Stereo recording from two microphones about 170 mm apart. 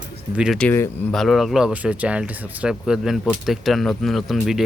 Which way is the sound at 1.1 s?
Centre (ahead or behind).